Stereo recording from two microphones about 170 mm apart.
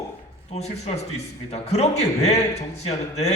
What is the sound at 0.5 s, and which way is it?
A man's voice, 40° left (ahead or behind).